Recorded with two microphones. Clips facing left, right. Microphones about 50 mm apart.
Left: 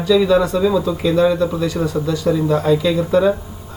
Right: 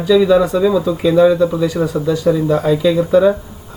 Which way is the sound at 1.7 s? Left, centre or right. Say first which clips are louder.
Right 3 dB; right.